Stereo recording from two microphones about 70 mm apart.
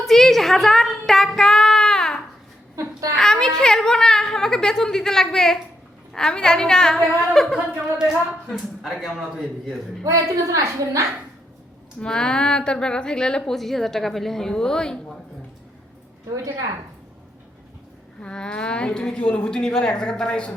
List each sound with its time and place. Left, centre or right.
0.0 s child singing: centre
3.2 s a woman's voice: centre
10.0 s a woman's voice: right
11.9 s a woman's voice: centre
18.2 s a woman's voice: centre